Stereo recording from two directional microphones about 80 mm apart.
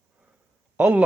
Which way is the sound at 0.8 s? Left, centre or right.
Centre.